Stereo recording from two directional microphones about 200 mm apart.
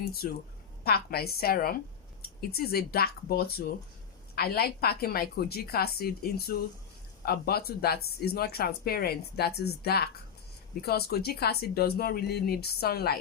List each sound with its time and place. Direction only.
0.0 s a woman's voice: 50° left (ahead or behind)